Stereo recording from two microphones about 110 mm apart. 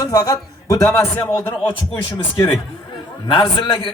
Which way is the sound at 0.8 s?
20° left (ahead or behind).